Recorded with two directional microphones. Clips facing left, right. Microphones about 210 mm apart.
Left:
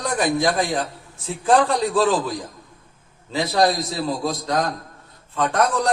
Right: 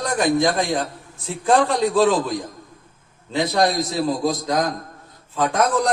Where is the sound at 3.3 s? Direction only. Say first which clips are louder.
Even; centre (ahead or behind).